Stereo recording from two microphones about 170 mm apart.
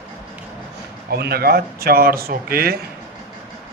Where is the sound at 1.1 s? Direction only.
65° right (ahead or behind).